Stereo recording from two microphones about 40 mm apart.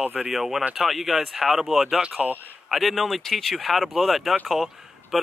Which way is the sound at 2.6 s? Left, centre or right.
Centre.